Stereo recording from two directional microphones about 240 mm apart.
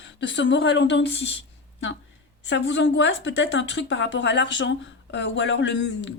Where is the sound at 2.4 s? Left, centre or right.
Left.